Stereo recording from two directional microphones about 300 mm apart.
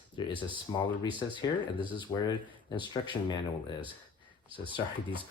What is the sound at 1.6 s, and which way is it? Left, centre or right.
Speech, centre.